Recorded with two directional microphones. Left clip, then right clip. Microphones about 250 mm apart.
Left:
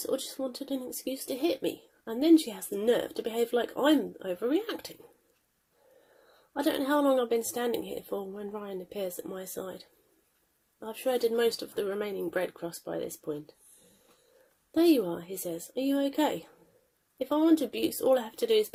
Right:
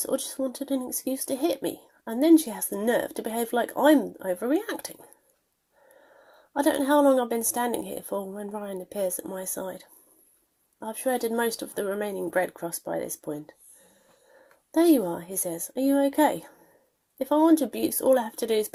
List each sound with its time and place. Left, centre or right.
0.0 s speech: right
2.0 s speech: right
6.5 s speech: right
14.7 s speech: right